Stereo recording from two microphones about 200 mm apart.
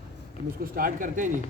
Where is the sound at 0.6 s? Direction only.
45° right (ahead or behind).